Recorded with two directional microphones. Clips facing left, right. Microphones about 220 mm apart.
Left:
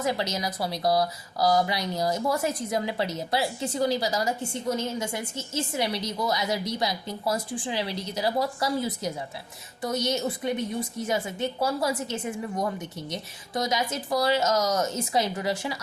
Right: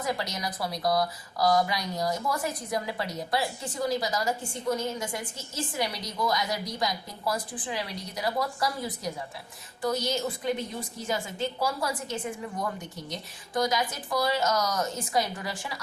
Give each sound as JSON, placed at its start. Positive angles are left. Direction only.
{"t": 0.0, "sound": "a woman's voice", "side_deg": 25}
{"t": 13.5, "sound": "a woman's voice", "side_deg": 25}